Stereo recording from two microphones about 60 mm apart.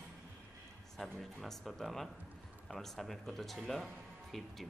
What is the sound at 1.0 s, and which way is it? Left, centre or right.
Speech, centre.